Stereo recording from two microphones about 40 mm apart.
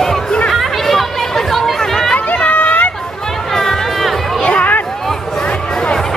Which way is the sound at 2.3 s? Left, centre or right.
Left.